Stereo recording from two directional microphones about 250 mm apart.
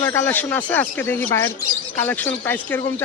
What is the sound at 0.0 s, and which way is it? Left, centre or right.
Speech, centre.